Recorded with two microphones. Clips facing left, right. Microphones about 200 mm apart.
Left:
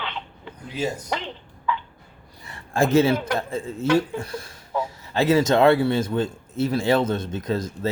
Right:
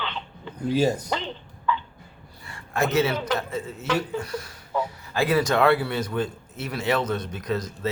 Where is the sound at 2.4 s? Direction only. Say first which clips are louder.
Left 4 dB; 25° left (ahead or behind).